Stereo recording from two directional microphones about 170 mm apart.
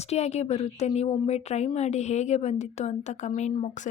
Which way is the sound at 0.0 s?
40° left (ahead or behind).